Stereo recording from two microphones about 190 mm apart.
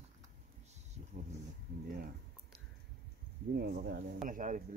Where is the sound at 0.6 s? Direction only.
35° right (ahead or behind).